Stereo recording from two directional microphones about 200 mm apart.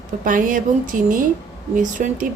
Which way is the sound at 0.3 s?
40° right (ahead or behind).